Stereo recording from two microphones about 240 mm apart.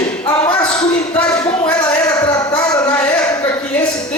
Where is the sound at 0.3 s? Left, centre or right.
Centre.